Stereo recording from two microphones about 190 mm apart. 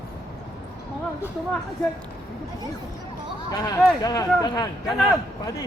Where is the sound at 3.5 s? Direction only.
20° left (ahead or behind).